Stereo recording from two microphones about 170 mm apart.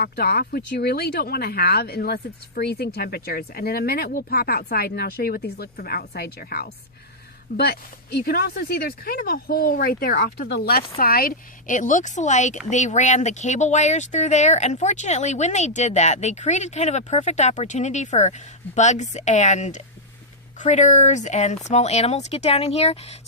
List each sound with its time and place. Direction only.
0.0 s speech: 65° left (ahead or behind); by 23.1 s 35° left (ahead or behind)